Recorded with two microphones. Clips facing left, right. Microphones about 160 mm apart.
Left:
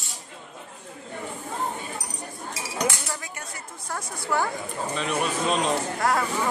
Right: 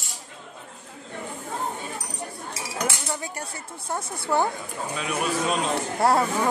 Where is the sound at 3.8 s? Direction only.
25° right (ahead or behind).